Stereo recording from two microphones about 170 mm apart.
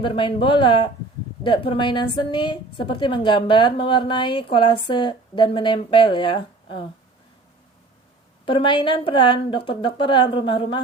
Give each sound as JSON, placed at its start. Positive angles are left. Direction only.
{"t": 0.0, "sound": "speech", "side_deg": 30}
{"t": 8.4, "sound": "speech", "side_deg": 30}